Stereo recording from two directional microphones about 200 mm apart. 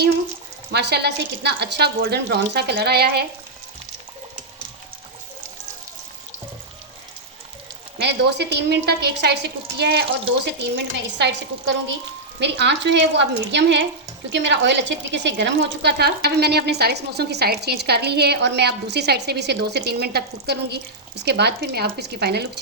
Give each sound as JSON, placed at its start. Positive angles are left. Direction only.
{"t": 0.7, "sound": "speech", "side_deg": -55}
{"t": 7.9, "sound": "speech", "side_deg": -60}
{"t": 12.4, "sound": "speech", "side_deg": -60}